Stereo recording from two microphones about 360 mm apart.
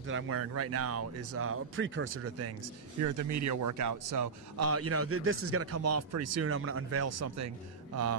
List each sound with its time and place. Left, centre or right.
0.0 s speech: right
3.0 s speech: right